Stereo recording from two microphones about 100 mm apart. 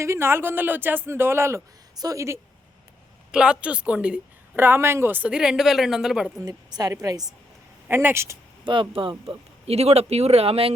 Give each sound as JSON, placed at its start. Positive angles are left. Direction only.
{"t": 0.0, "sound": "a woman's voice", "side_deg": -25}
{"t": 3.3, "sound": "speech", "side_deg": -10}
{"t": 6.4, "sound": "a woman's voice", "side_deg": -40}
{"t": 7.9, "sound": "speech", "side_deg": -25}
{"t": 8.6, "sound": "speech", "side_deg": -55}